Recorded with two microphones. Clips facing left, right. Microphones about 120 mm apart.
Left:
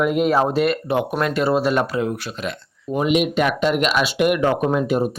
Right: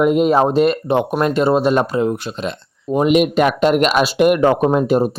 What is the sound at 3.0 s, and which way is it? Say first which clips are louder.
Speech: right 5 dB; 45° right (ahead or behind).